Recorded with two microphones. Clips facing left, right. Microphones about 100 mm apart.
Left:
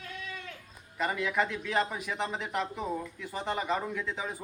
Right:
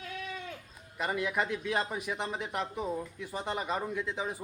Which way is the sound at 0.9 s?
10° right (ahead or behind).